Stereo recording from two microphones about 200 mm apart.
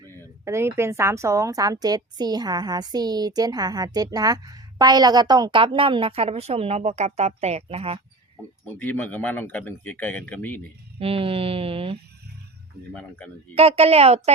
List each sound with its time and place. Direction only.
0.4 s a woman's voice: 15° right (ahead or behind); by 8.0 s 30° right (ahead or behind)
8.8 s a man's voice: 10° left (ahead or behind)
11.0 s a woman's voice: 30° right (ahead or behind)
12.9 s speech: 5° left (ahead or behind)
13.6 s a woman's voice: 30° right (ahead or behind)